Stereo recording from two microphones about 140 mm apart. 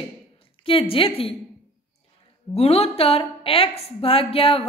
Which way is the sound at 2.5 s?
45° left (ahead or behind).